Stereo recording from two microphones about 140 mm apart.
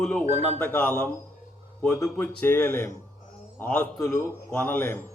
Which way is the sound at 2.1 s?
15° left (ahead or behind).